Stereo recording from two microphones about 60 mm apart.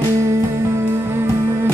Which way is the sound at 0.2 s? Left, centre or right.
Right.